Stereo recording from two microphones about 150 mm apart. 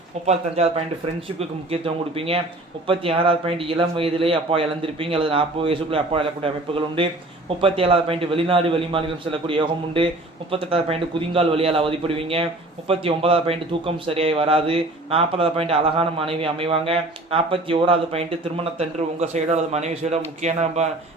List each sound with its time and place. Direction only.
0.3 s a man's voice: 45° right (ahead or behind)